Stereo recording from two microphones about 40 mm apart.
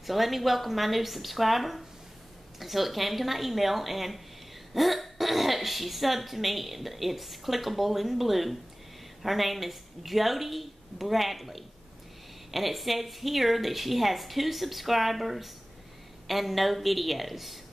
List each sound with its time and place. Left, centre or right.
0.0 s speech: centre